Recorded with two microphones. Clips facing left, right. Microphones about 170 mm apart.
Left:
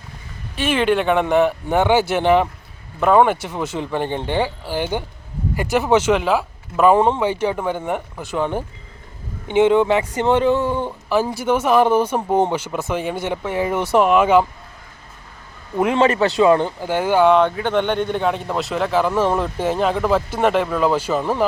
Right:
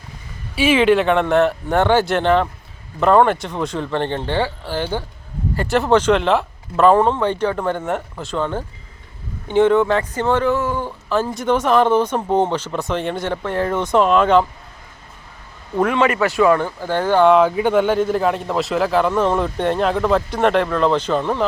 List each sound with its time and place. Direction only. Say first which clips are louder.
0.5 s speech: right 4 dB; 5° right (ahead or behind); by 10.9 s 20° left (ahead or behind)
11.1 s speech: even; 10° left (ahead or behind)
15.9 s speech: left 3 dB; 30° left (ahead or behind)
16.9 s speech: right 1 dB; 10° left (ahead or behind)
17.2 s speech: right 2 dB; 5° right (ahead or behind)